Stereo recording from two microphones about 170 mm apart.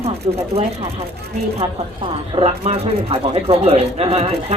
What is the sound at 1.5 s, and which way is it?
A woman's voice, 35° right (ahead or behind).